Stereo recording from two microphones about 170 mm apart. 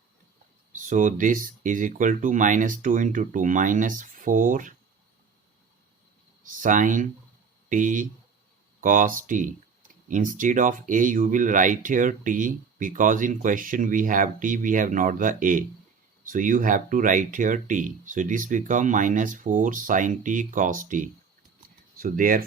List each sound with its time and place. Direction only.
0.7 s speech: 50° right (ahead or behind)
6.4 s speech: 50° right (ahead or behind)